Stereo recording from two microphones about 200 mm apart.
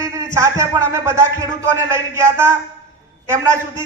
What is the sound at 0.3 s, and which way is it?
Speech, 15° right (ahead or behind).